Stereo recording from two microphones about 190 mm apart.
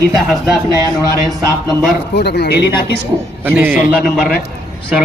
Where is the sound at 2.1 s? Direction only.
60° left (ahead or behind).